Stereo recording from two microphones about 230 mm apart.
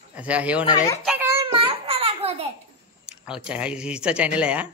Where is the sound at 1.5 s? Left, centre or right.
Right.